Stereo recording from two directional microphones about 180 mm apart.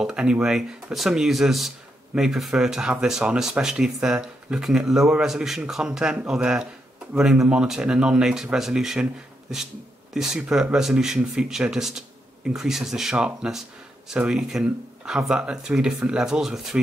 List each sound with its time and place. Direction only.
0.0 s speech: 5° right (ahead or behind)
10.1 s speech: 5° right (ahead or behind)